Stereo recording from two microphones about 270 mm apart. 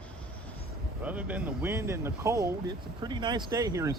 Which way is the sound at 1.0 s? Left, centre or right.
Centre.